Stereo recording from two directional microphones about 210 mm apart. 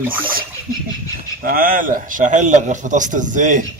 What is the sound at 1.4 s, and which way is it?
A man's voice, 45° right (ahead or behind).